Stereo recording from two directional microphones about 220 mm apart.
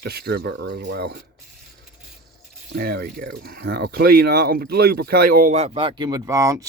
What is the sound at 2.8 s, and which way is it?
Speech, 45° right (ahead or behind).